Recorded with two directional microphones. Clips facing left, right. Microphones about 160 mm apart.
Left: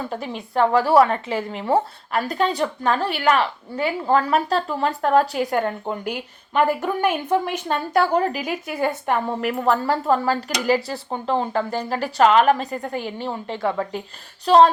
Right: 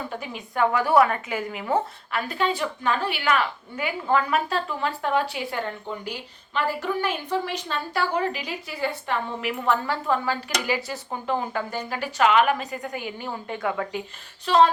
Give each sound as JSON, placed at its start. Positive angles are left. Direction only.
{"t": 0.2, "sound": "speech", "side_deg": 35}